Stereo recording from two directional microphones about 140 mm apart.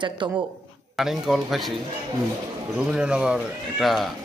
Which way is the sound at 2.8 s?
5° right (ahead or behind).